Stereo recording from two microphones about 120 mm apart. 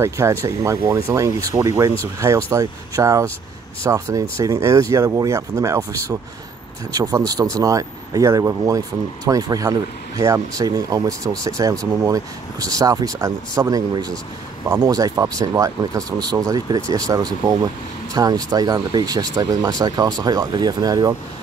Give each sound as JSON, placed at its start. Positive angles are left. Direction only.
{"t": 0.0, "sound": "speech", "side_deg": -25}